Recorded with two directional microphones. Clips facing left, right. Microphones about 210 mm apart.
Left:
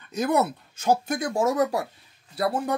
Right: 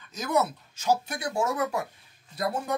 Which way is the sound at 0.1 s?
60° left (ahead or behind).